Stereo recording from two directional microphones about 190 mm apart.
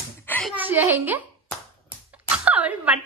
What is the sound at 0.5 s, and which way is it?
A woman's voice, 10° right (ahead or behind).